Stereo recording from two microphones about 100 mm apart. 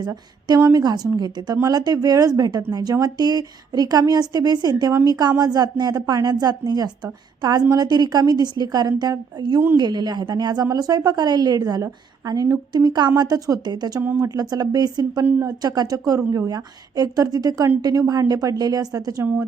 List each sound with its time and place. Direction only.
0.7 s a woman's voice: 40° right (ahead or behind)